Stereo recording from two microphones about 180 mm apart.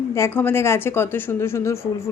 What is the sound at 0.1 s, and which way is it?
A woman's voice, 15° left (ahead or behind).